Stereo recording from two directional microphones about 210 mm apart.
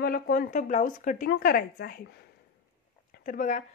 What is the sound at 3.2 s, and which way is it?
Speech, 40° left (ahead or behind).